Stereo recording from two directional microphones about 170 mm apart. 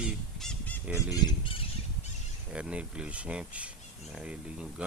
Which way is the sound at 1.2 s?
30° left (ahead or behind).